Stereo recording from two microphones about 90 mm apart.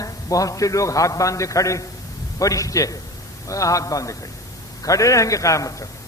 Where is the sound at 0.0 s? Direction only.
40° left (ahead or behind).